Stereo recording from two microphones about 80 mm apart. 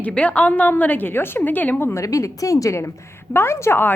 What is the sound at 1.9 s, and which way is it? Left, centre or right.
A woman's voice, left.